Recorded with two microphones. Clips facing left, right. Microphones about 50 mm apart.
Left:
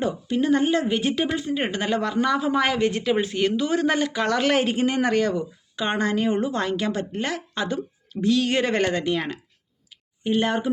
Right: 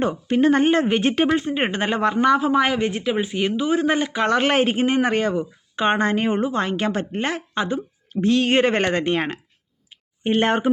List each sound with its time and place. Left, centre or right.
0.0 s a woman's voice: right
10.2 s speech: right